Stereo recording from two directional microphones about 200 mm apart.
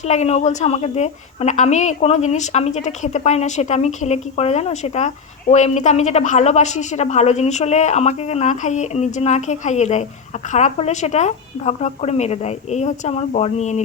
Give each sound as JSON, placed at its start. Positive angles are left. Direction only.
{"t": 0.0, "sound": "a woman's voice", "side_deg": 35}